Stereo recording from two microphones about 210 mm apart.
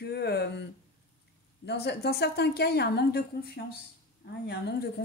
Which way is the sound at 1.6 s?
50° left (ahead or behind).